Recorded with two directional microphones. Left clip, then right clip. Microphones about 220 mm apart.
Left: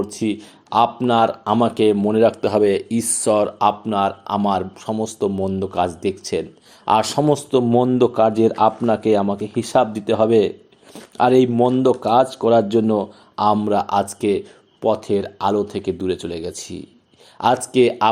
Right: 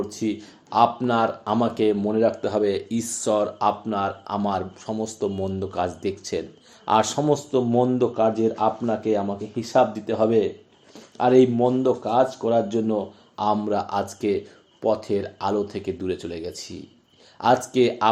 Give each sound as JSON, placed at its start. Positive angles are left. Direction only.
{"t": 0.0, "sound": "speech", "side_deg": 30}